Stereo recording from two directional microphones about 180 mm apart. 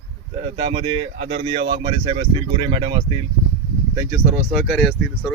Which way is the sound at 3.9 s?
10° right (ahead or behind).